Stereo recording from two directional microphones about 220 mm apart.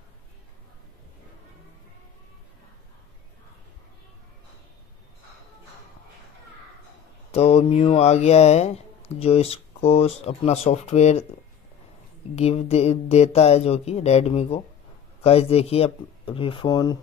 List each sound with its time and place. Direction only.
7.3 s speech: 30° left (ahead or behind)
12.4 s speech: 30° left (ahead or behind)